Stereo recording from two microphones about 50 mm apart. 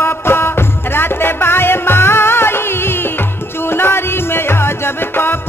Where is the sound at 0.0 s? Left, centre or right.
Left.